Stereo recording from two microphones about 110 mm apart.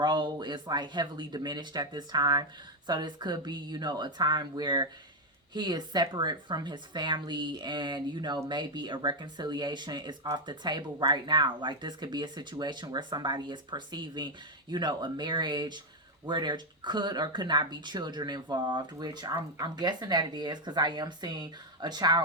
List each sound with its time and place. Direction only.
0.0 s speech: 40° right (ahead or behind)